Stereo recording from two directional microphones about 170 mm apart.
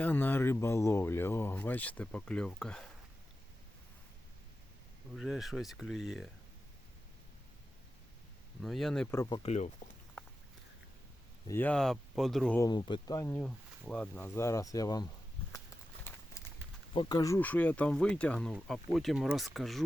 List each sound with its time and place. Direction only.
0.0 s speech: 10° left (ahead or behind)
5.1 s speech: centre (ahead or behind)
8.6 s speech: centre (ahead or behind)
9.1 s speech: 15° left (ahead or behind)
9.4 s speech: 40° left (ahead or behind)
11.4 s speech: 10° left (ahead or behind)
12.5 s speech: 25° left (ahead or behind)
13.3 s speech: 5° left (ahead or behind); by 15.1 s 20° left (ahead or behind)
16.9 s speech: 25° left (ahead or behind); by 19.8 s centre (ahead or behind)